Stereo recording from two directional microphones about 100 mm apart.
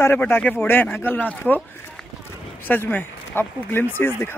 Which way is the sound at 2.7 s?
20° left (ahead or behind).